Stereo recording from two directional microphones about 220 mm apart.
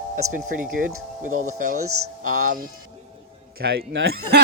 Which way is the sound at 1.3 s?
75° right (ahead or behind).